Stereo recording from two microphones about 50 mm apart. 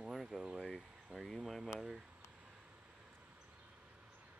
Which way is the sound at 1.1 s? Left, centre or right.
Centre.